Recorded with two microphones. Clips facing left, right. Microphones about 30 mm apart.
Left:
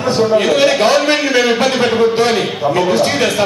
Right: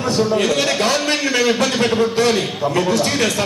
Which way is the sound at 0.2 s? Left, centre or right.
Centre.